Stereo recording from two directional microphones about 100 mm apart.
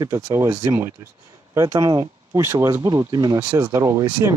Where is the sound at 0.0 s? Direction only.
30° right (ahead or behind).